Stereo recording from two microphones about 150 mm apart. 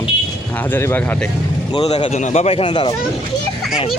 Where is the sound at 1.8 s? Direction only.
40° left (ahead or behind).